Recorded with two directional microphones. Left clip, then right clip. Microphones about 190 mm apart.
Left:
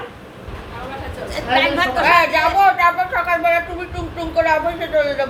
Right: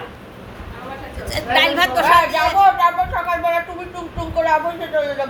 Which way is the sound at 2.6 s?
10° left (ahead or behind).